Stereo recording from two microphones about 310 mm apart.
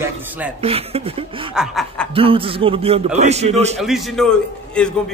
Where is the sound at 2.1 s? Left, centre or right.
Centre.